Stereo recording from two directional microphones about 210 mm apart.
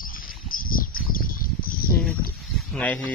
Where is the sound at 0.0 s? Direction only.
40° left (ahead or behind).